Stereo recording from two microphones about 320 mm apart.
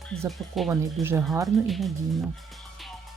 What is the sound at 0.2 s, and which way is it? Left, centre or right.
Speech, centre.